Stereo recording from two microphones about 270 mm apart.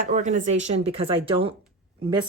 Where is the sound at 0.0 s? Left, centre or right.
Right.